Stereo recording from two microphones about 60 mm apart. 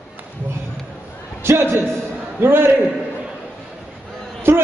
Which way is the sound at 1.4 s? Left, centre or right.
Right.